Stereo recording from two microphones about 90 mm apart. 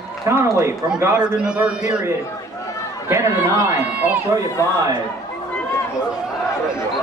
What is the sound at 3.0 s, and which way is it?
A man's voice, 25° right (ahead or behind).